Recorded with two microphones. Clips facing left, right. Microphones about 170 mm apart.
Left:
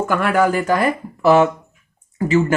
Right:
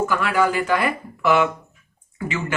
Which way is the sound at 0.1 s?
50° left (ahead or behind).